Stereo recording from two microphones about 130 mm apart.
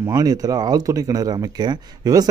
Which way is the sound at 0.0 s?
30° right (ahead or behind).